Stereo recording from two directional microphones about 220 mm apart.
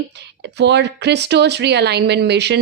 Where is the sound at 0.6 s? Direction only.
50° right (ahead or behind).